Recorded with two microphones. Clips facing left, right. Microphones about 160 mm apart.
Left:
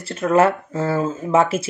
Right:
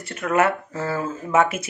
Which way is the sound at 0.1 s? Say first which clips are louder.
Left 4 dB; 30° left (ahead or behind).